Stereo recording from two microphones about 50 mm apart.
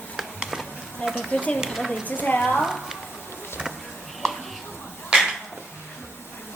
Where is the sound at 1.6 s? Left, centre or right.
Centre.